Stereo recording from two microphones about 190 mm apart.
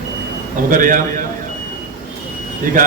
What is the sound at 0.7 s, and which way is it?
Speech, 45° right (ahead or behind).